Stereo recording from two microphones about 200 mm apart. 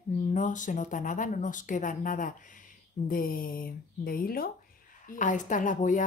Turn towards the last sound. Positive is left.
turn(degrees=40)  # may be behind; listen again after turning